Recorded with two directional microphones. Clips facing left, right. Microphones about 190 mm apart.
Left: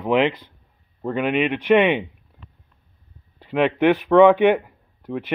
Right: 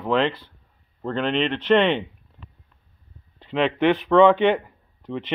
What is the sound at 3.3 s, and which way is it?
A man's voice, 10° left (ahead or behind).